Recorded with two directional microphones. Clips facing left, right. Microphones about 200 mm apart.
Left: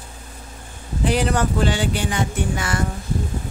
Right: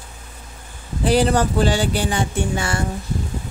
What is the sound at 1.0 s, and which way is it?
Speech, 35° right (ahead or behind).